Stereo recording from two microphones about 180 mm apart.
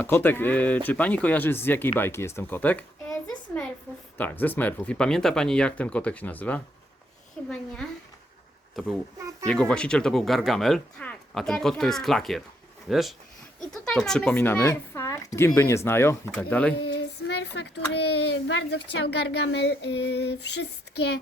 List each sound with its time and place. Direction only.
0.0 s speech: 10° left (ahead or behind)
16.8 s female singing: 70° left (ahead or behind)
17.9 s a child's voice: 70° left (ahead or behind)